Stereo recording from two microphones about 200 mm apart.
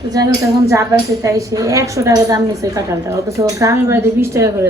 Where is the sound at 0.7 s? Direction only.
15° right (ahead or behind).